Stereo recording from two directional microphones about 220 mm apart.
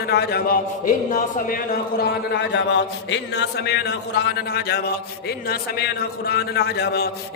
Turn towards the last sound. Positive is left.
turn(degrees=50)  # may be behind; listen again after turning